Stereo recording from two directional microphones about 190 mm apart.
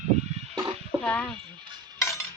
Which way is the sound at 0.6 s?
20° right (ahead or behind).